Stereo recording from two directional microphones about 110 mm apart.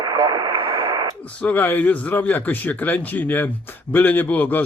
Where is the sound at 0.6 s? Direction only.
35° right (ahead or behind).